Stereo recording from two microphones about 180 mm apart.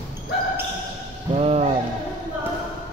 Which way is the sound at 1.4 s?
35° right (ahead or behind).